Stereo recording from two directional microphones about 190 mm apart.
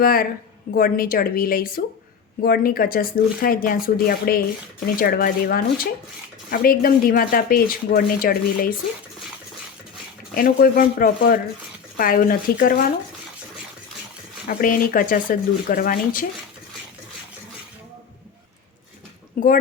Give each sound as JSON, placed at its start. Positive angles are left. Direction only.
{"t": 0.0, "sound": "speech", "side_deg": 50}
{"t": 10.3, "sound": "speech", "side_deg": 50}
{"t": 14.4, "sound": "speech", "side_deg": 45}
{"t": 19.4, "sound": "speech", "side_deg": 40}